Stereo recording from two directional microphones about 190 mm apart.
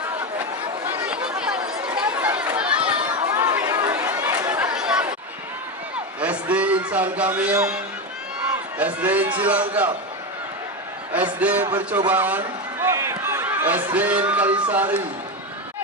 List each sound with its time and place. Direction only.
0.9 s chatter: 10° right (ahead or behind)
3.3 s chatter: 20° right (ahead or behind)
6.1 s a sound: 5° right (ahead or behind)
8.8 s a man's voice: 10° right (ahead or behind)
11.3 s a man's voice: 10° right (ahead or behind)